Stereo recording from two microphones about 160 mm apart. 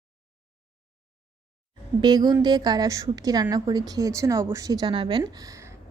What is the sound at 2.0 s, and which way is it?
A woman's voice, 25° right (ahead or behind).